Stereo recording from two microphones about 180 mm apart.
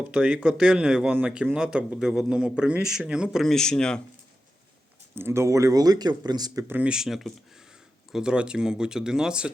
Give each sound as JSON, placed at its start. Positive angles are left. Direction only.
{"t": 0.1, "sound": "a man's voice", "side_deg": -5}
{"t": 5.1, "sound": "a man's voice", "side_deg": -15}